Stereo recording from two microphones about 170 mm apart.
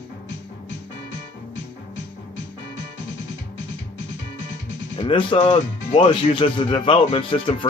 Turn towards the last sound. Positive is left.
turn(degrees=30)  # may be behind; listen again after turning